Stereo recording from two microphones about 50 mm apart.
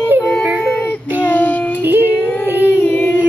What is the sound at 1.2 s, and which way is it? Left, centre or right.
Child singing, left.